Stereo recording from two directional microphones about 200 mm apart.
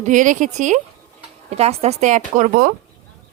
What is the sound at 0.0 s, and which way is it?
Speech, 40° right (ahead or behind).